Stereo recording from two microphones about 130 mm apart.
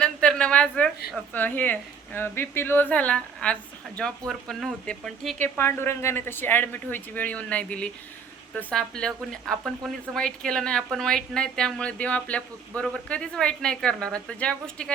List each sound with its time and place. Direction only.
0.0 s a woman's voice: 10° left (ahead or behind)
5.4 s speech: 20° left (ahead or behind)